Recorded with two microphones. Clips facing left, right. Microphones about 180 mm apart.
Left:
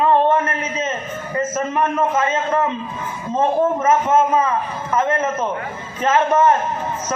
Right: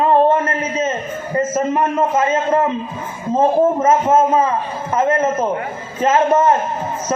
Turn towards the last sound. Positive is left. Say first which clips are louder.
# right 2 dB
turn(degrees=-30)  # may be behind; listen again after turning